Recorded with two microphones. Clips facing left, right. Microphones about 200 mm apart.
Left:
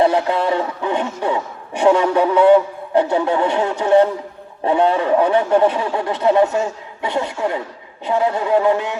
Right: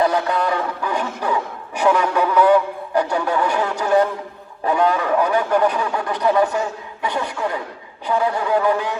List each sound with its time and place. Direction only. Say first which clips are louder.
0.0 s a man's voice: left 3 dB; 25° left (ahead or behind)